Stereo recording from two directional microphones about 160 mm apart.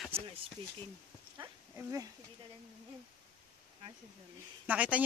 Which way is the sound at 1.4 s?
20° right (ahead or behind).